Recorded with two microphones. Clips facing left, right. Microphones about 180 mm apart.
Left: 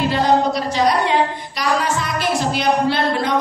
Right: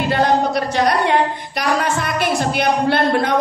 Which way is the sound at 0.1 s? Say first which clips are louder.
Right 4 dB; 60° right (ahead or behind).